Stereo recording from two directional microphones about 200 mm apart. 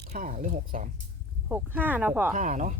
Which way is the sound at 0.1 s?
40° right (ahead or behind).